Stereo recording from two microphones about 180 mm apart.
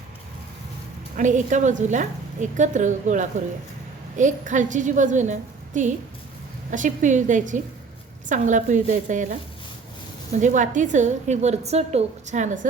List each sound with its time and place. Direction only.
1.1 s a woman's voice: 45° right (ahead or behind)
10.4 s a woman's voice: 45° right (ahead or behind)